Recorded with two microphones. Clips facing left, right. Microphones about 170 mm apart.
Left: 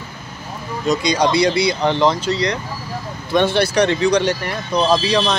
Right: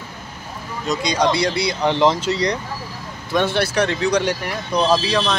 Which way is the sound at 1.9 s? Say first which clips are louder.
Right 3 dB; 20° right (ahead or behind).